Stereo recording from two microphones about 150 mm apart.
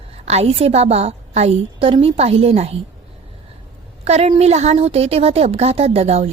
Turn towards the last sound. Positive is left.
turn(degrees=-45)  # may be behind; listen again after turning